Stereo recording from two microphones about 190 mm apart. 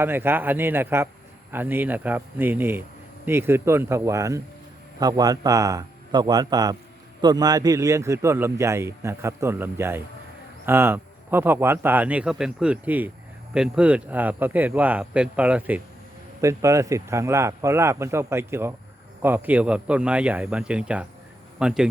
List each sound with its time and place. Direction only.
0.0 s a man's voice: 10° right (ahead or behind)